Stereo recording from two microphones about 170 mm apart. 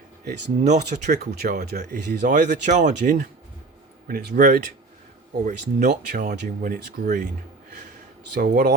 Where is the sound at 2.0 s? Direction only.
45° right (ahead or behind).